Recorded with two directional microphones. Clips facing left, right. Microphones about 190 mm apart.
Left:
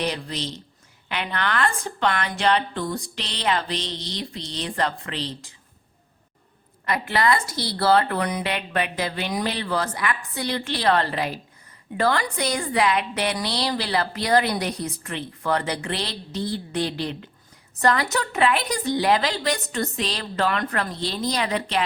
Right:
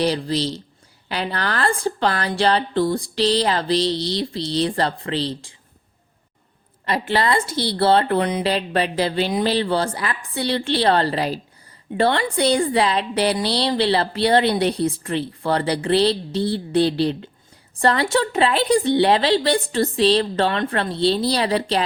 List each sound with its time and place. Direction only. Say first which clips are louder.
0.0 s a woman's voice: right 7 dB; 35° right (ahead or behind)
6.8 s a woman's voice: right 2 dB; 30° right (ahead or behind)